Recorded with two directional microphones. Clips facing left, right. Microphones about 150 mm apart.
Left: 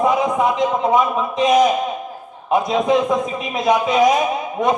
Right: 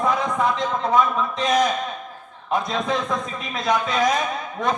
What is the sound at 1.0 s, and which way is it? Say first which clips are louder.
Speech: left 3 dB; 15° left (ahead or behind).